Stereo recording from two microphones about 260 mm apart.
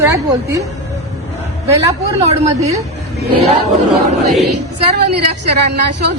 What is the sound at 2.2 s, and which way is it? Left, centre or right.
Speech, right.